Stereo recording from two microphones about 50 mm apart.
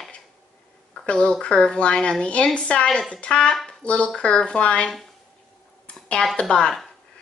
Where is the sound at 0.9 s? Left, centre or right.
Centre.